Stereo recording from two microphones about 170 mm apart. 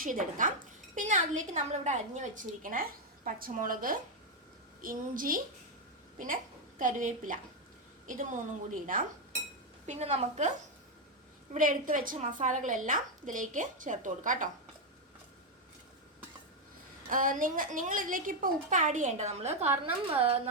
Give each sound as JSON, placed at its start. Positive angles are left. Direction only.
{"t": 0.0, "sound": "a woman's voice", "side_deg": -55}
{"t": 6.7, "sound": "a woman's voice", "side_deg": -50}
{"t": 9.8, "sound": "a woman's voice", "side_deg": -40}
{"t": 11.5, "sound": "a woman's voice", "side_deg": -50}
{"t": 17.1, "sound": "a woman's voice", "side_deg": -50}